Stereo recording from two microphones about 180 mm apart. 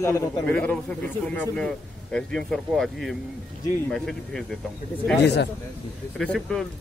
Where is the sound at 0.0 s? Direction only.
10° left (ahead or behind).